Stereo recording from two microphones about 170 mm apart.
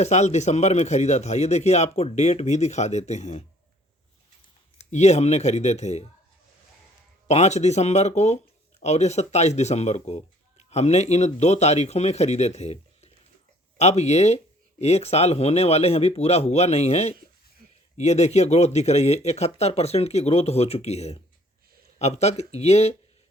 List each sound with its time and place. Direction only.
0.0 s speech: 40° left (ahead or behind)
4.8 s speech: 40° left (ahead or behind)
7.3 s speech: 40° left (ahead or behind)
17.6 s a sound: 60° right (ahead or behind)
17.9 s speech: 40° left (ahead or behind)